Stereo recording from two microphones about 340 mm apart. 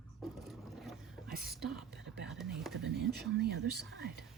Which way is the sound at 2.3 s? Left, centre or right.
Centre.